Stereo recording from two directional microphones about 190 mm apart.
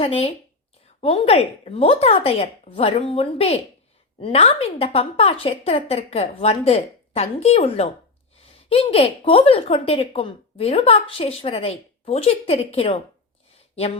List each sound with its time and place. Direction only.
0.0 s speech: 30° left (ahead or behind)